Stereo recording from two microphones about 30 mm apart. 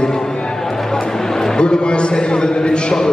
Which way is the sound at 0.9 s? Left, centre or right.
Centre.